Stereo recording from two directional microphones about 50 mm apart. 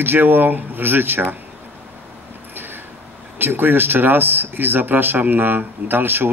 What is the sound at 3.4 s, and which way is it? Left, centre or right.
A man's voice, right.